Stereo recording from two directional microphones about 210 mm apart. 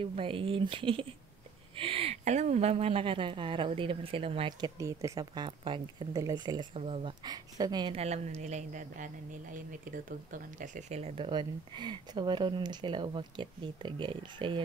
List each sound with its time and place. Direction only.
0.0 s a woman's voice: 25° right (ahead or behind)